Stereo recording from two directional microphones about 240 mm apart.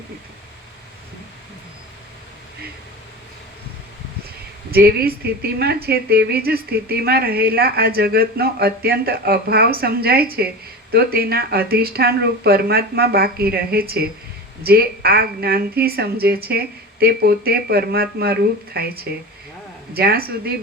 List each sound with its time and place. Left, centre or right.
4.7 s a woman's voice: right